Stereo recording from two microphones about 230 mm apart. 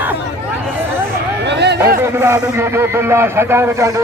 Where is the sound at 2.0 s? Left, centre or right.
Centre.